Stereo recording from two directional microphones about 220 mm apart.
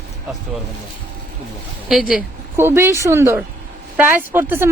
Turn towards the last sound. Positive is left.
turn(degrees=-10)  # may be behind; listen again after turning